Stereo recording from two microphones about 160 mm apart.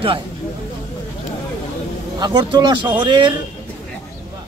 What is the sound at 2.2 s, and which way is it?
Speech, 30° right (ahead or behind).